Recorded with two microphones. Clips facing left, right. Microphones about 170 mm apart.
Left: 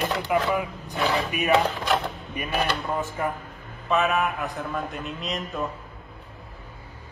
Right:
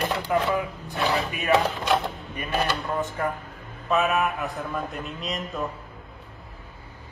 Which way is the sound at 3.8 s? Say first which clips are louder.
Even; centre (ahead or behind).